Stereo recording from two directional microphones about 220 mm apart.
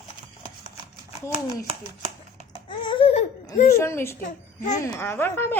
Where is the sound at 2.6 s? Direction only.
20° left (ahead or behind).